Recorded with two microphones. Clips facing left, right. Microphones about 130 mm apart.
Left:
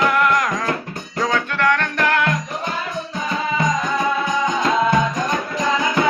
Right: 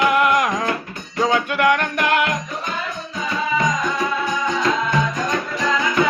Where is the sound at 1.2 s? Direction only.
15° right (ahead or behind).